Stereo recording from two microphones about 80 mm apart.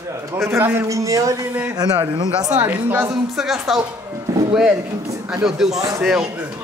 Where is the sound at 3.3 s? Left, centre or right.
Centre.